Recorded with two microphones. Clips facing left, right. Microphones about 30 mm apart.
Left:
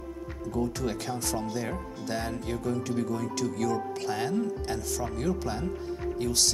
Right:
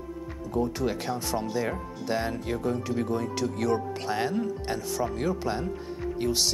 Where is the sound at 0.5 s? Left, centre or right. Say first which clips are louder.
Right 3 dB; centre.